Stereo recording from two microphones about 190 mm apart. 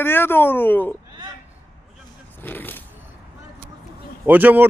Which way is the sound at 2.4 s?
10° left (ahead or behind).